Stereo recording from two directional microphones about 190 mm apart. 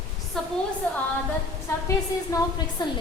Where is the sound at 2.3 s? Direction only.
20° left (ahead or behind).